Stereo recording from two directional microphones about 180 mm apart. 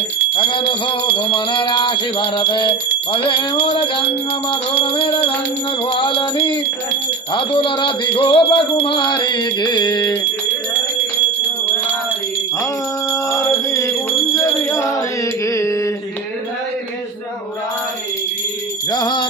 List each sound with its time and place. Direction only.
0.4 s music: 25° left (ahead or behind)
13.1 s music: 15° left (ahead or behind)
18.9 s music: 25° left (ahead or behind)